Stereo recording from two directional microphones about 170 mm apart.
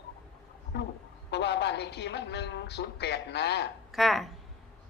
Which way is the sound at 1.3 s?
80° left.